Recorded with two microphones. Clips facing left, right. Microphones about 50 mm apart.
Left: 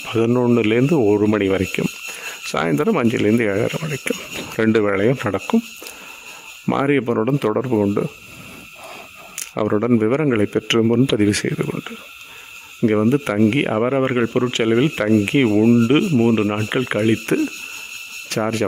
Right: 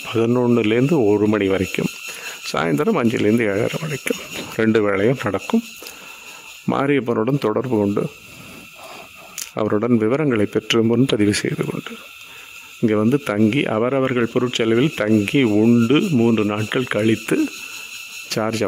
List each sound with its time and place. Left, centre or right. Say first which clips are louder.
0.0 s speech: left 1 dB; centre
6.7 s speech: even; centre
9.6 s speech: left 1 dB; centre